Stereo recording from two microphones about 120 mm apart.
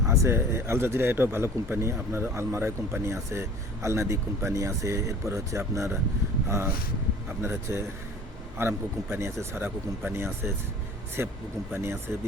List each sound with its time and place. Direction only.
0.1 s speech: 25° right (ahead or behind)